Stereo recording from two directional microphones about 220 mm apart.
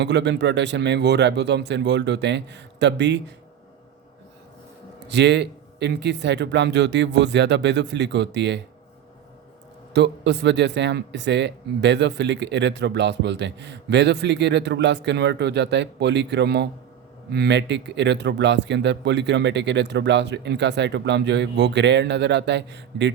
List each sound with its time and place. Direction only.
0.0 s speech: 50° right (ahead or behind)
5.0 s speech: 50° right (ahead or behind)
9.9 s speech: 50° right (ahead or behind)